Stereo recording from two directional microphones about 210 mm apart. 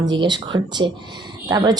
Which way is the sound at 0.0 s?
20° right (ahead or behind).